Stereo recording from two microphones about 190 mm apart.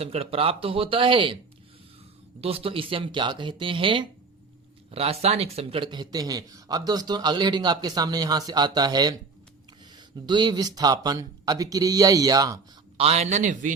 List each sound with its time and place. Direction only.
0.0 s speech: 30° right (ahead or behind)
2.4 s speech: 30° right (ahead or behind)
13.0 s a man's voice: 35° right (ahead or behind)